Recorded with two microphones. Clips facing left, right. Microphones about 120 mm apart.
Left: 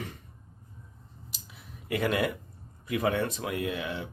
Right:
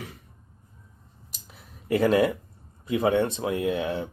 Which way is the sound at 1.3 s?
40° right (ahead or behind).